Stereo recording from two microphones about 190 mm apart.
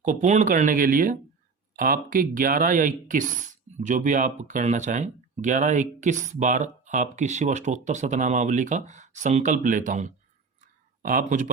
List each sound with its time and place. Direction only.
0.0 s speech: 40° right (ahead or behind)